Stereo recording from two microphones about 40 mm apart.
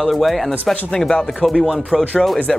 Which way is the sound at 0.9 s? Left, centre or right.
Centre.